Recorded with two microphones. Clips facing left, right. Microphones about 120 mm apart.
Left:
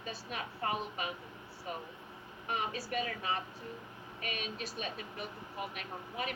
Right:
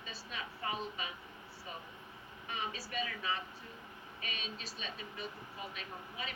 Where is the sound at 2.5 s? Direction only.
50° left (ahead or behind).